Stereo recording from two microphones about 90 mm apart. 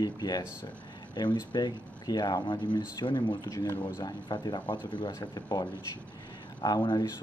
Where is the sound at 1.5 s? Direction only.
50° left (ahead or behind).